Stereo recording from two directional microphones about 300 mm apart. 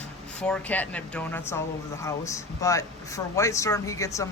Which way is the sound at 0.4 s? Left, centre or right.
Centre.